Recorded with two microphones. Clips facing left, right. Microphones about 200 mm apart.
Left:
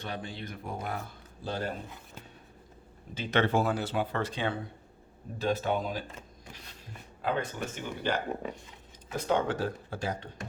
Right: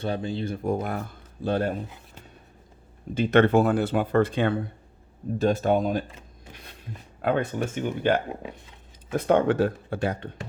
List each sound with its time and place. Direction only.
0.0 s speech: 30° right (ahead or behind)
0.6 s speech: 50° right (ahead or behind)
3.2 s speech: 55° right (ahead or behind)
7.2 s speech: 60° right (ahead or behind)